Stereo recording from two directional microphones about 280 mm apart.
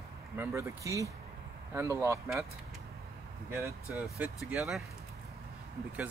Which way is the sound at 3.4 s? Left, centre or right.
Centre.